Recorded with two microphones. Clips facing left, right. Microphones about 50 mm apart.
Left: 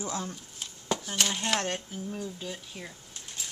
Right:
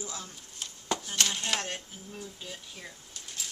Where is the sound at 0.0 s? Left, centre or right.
Left.